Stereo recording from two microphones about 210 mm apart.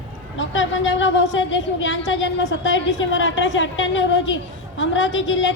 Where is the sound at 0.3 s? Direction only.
65° left (ahead or behind).